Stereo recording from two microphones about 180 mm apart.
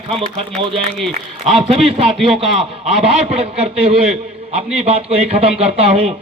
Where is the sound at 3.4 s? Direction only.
30° right (ahead or behind).